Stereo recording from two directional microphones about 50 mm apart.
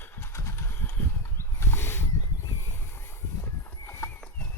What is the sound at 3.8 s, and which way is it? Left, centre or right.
Horse, left.